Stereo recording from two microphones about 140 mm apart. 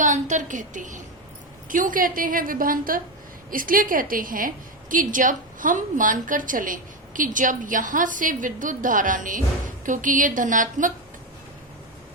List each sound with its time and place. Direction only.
0.0 s a woman's voice: 65° right (ahead or behind)